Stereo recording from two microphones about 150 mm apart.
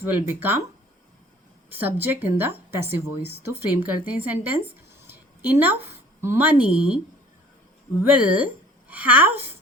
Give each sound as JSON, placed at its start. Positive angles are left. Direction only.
{"t": 0.0, "sound": "a woman's voice", "side_deg": -15}
{"t": 1.7, "sound": "a woman's voice", "side_deg": -15}
{"t": 8.0, "sound": "a woman's voice", "side_deg": -10}